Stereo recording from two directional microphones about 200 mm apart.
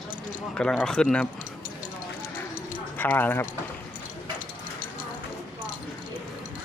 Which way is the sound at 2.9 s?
10° left (ahead or behind).